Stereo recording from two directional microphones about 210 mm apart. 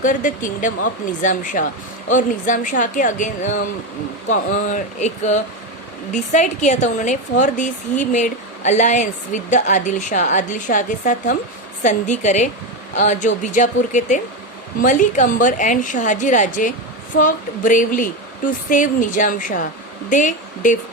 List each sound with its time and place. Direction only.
0.0 s a woman's voice: 40° left (ahead or behind)